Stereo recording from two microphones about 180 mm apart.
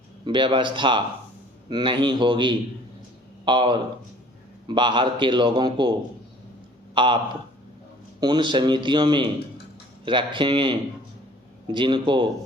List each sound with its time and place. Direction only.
0.3 s a man's voice: 25° right (ahead or behind)
6.9 s a man's voice: 25° right (ahead or behind)
8.2 s a man's voice: 25° right (ahead or behind)